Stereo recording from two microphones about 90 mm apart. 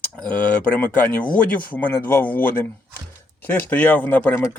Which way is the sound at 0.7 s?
15° left (ahead or behind).